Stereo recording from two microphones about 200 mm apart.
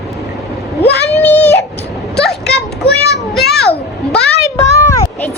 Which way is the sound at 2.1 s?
5° left (ahead or behind).